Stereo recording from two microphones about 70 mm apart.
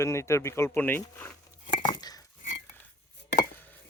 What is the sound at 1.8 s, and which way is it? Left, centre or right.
Dishes, left.